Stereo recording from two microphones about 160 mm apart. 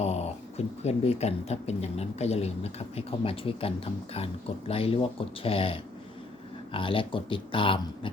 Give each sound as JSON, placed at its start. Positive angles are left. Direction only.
{"t": 0.0, "sound": "speech", "side_deg": 40}